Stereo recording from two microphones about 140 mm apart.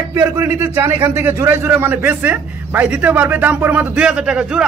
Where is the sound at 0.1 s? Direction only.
15° right (ahead or behind).